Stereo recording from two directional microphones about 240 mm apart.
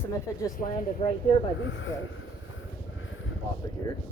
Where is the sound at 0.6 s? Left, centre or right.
Left.